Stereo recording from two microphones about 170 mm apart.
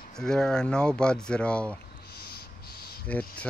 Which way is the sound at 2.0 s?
65° left (ahead or behind).